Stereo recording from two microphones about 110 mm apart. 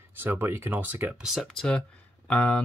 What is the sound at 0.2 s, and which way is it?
Speech, 20° right (ahead or behind).